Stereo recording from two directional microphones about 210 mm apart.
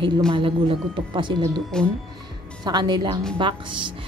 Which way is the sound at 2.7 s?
20° right (ahead or behind).